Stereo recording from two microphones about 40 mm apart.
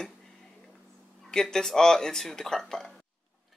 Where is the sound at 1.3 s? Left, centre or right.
Centre.